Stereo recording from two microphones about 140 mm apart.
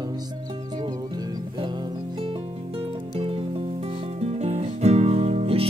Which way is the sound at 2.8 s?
45° right (ahead or behind).